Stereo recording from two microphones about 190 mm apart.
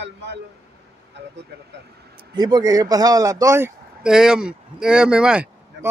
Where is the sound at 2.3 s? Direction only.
20° right (ahead or behind).